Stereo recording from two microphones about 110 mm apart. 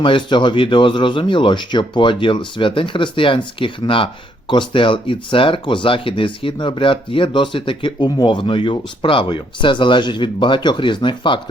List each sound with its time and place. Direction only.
0.0 s speech: 45° left (ahead or behind)